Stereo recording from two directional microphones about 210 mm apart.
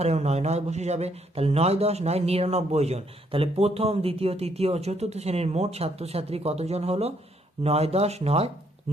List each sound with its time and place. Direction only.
0.0 s speech: 30° right (ahead or behind)